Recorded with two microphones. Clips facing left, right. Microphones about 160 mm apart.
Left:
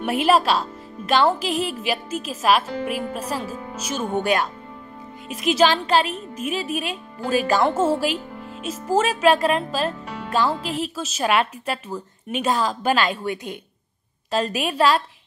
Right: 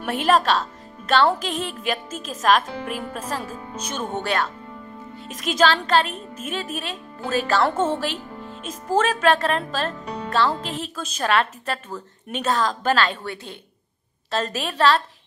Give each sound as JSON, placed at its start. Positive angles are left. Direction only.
{"t": 0.2, "sound": "speech", "side_deg": 10}